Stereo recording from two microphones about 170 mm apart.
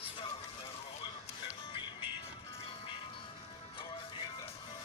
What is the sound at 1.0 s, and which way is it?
Music, 30° left (ahead or behind).